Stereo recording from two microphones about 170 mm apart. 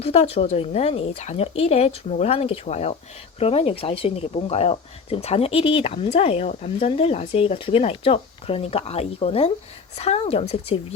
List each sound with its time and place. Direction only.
0.0 s speech: 35° left (ahead or behind)